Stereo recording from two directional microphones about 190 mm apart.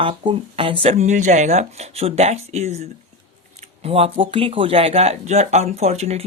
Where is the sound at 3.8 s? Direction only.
30° right (ahead or behind).